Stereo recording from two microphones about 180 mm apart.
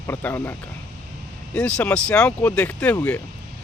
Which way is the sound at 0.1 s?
10° left (ahead or behind).